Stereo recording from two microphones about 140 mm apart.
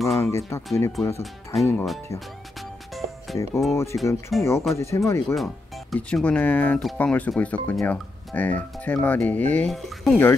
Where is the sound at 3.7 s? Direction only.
20° left (ahead or behind).